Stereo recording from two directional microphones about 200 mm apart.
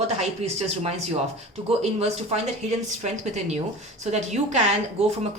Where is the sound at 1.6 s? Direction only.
30° right (ahead or behind).